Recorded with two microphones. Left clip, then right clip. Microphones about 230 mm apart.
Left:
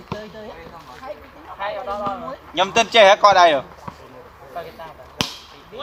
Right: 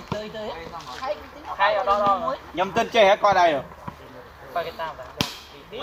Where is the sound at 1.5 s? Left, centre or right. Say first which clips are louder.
Right 6 dB; right.